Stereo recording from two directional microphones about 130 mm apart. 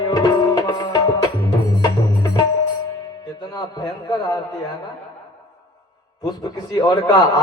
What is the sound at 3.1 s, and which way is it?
Music, 30° left (ahead or behind).